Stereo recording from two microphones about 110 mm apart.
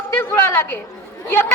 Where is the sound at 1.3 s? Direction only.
20° left (ahead or behind).